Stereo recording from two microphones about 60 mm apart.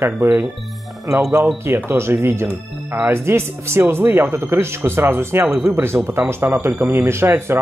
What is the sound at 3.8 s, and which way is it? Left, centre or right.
Speech, right.